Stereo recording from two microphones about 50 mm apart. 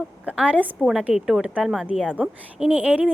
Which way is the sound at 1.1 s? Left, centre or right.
Centre.